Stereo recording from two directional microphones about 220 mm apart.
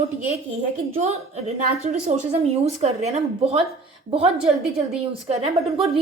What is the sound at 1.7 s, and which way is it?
A woman's voice, 30° right (ahead or behind).